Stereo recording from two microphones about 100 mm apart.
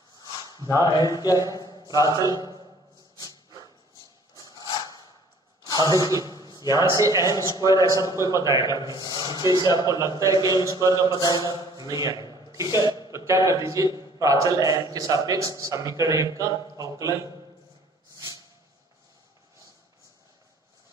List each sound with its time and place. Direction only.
0.5 s a sound: 40° left (ahead or behind)
0.8 s speech: 45° left (ahead or behind)
1.5 s a sound: 45° left (ahead or behind)
2.0 s a man's voice: 45° left (ahead or behind)
4.4 s a sound: 40° left (ahead or behind)
6.6 s a man's voice: 35° right (ahead or behind)
7.4 s speech: 40° left (ahead or behind)
8.2 s a man's voice: 35° right (ahead or behind)
8.5 s a man's voice: 50° left (ahead or behind)
9.2 s a man's voice: 40° right (ahead or behind)
11.2 s speech: 40° left (ahead or behind)
11.7 s a man's voice: 40° right (ahead or behind)
12.4 s a sound: 35° right (ahead or behind)
13.1 s a man's voice: 30° right (ahead or behind)